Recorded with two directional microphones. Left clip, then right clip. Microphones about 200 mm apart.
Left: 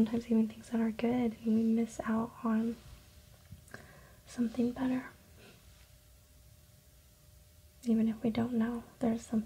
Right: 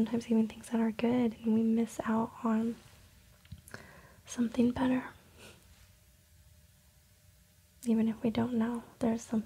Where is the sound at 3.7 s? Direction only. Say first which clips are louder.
Right 2 dB; 10° right (ahead or behind).